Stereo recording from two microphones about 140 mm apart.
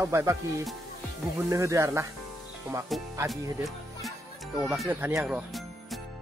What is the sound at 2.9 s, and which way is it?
Speech, centre (ahead or behind).